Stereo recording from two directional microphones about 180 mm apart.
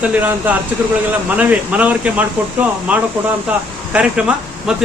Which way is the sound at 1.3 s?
10° right (ahead or behind).